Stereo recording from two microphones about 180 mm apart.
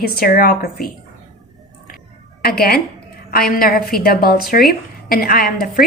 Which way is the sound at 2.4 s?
55° left (ahead or behind).